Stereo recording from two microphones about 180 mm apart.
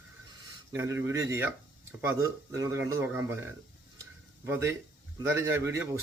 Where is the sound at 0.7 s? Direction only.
15° right (ahead or behind).